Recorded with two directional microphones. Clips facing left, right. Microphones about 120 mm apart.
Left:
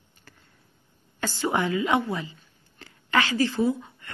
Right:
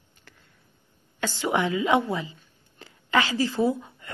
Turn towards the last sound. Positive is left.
turn(degrees=-20)  # may be behind; listen again after turning